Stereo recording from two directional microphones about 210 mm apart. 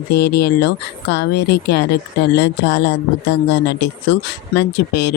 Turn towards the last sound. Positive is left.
turn(degrees=55)  # may be behind; listen again after turning